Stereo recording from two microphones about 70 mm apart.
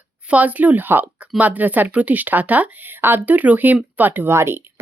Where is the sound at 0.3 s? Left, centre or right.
Right.